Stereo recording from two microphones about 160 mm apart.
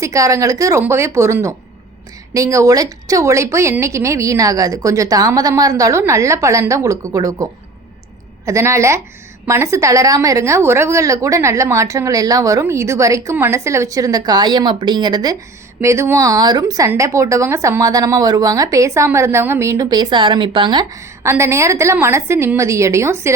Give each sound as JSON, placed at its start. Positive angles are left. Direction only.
{"t": 0.0, "sound": "speech", "side_deg": -20}
{"t": 8.4, "sound": "a woman's voice", "side_deg": -20}